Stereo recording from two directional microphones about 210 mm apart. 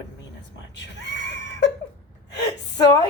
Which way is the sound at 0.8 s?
55° left (ahead or behind).